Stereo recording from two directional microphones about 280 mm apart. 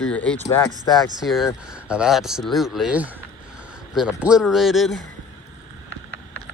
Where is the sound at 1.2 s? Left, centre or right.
Centre.